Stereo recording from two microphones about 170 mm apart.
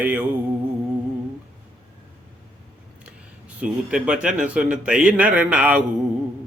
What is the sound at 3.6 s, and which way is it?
Speech, 5° right (ahead or behind).